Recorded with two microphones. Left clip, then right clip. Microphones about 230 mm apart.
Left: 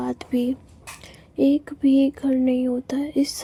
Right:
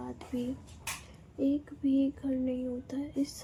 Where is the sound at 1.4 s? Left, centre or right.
Left.